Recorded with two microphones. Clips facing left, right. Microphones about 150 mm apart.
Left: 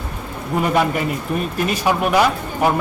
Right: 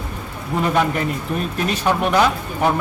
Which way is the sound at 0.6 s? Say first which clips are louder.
Left 1 dB; 5° left (ahead or behind).